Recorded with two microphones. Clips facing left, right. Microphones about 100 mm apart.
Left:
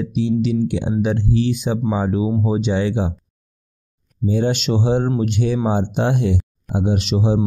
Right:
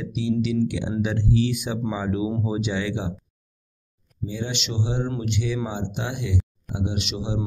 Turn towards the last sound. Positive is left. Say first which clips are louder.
# left 9 dB
turn(degrees=40)  # may be behind; listen again after turning